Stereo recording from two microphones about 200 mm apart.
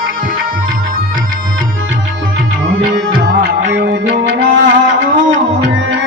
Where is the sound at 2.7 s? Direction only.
60° right (ahead or behind).